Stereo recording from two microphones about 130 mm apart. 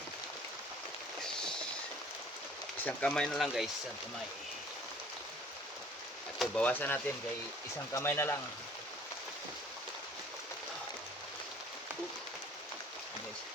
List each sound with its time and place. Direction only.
1.2 s a sound: 5° left (ahead or behind)
2.8 s speech: 10° left (ahead or behind)
6.5 s speech: 10° left (ahead or behind)